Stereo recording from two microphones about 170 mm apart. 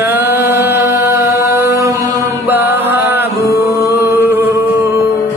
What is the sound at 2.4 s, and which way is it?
Music, 10° right (ahead or behind).